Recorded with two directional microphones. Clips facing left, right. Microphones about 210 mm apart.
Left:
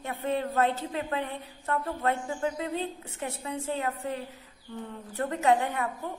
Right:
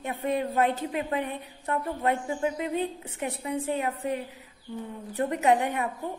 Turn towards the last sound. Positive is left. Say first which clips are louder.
# right 1 dB
turn(degrees=-15)  # may be behind; listen again after turning